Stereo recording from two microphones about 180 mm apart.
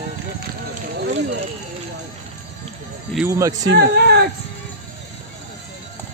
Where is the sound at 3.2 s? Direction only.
15° right (ahead or behind).